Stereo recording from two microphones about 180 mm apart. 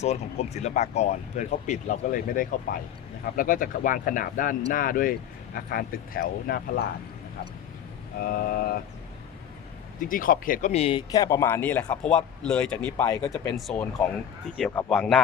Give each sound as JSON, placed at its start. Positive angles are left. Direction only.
{"t": 0.0, "sound": "speech", "side_deg": 35}
{"t": 8.2, "sound": "speech", "side_deg": 55}
{"t": 10.0, "sound": "speech", "side_deg": 50}
{"t": 11.1, "sound": "a man's voice", "side_deg": 15}
{"t": 14.4, "sound": "speech", "side_deg": 0}